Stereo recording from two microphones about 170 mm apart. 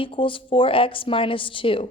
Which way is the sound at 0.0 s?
30° left (ahead or behind).